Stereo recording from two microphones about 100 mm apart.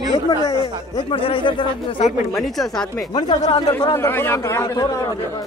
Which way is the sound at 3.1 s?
45° left (ahead or behind).